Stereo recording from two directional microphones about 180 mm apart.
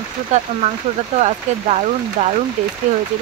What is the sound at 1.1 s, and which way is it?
Speech, 35° right (ahead or behind).